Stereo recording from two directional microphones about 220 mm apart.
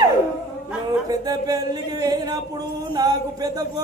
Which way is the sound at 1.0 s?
15° right (ahead or behind).